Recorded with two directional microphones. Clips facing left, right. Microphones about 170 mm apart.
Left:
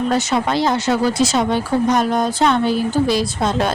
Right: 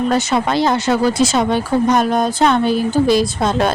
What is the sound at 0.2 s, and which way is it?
Speech, 55° right (ahead or behind).